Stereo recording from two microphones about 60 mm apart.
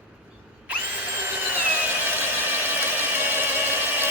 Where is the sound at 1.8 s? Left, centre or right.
Right.